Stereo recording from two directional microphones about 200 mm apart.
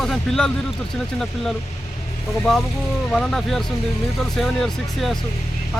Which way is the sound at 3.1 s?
5° left (ahead or behind).